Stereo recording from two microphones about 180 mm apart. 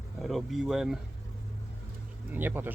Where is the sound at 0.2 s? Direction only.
Centre (ahead or behind).